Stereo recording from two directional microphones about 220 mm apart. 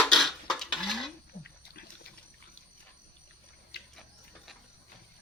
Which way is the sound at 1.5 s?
45° left (ahead or behind).